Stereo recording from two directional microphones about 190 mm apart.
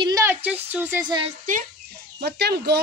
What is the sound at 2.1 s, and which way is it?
Speech, 60° right (ahead or behind).